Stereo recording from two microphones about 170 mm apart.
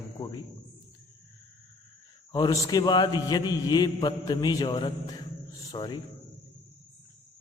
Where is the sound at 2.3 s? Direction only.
25° left (ahead or behind).